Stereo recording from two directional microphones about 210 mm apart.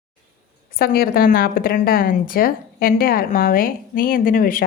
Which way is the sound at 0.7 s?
45° left (ahead or behind).